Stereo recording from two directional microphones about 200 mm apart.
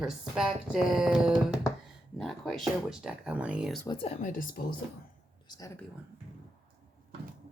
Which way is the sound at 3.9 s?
30° left (ahead or behind).